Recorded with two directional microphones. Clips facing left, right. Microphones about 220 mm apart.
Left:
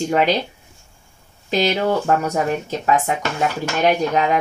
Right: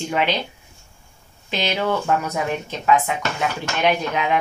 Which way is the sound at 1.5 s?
40° left (ahead or behind).